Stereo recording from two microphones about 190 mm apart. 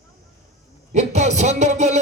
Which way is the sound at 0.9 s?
35° right (ahead or behind).